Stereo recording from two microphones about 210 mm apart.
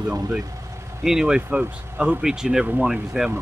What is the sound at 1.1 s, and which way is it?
Speech, 5° right (ahead or behind).